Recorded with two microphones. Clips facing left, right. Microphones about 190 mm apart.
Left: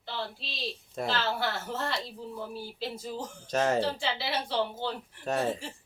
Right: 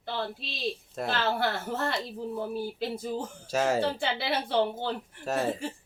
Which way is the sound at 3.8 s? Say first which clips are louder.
Right 2 dB; 55° right (ahead or behind).